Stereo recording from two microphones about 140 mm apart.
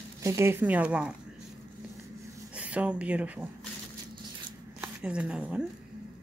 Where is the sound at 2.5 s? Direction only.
10° right (ahead or behind).